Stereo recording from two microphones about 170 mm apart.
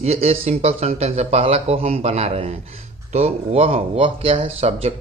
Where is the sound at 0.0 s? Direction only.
35° right (ahead or behind).